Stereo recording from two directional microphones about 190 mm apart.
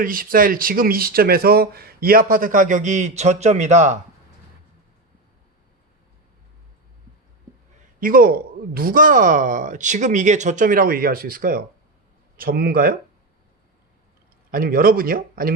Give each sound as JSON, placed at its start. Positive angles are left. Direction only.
{"t": 0.0, "sound": "speech", "side_deg": -45}
{"t": 8.0, "sound": "speech", "side_deg": -50}
{"t": 14.5, "sound": "speech", "side_deg": -50}